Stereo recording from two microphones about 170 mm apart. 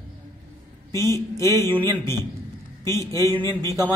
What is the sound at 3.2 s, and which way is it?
Speech, 25° right (ahead or behind).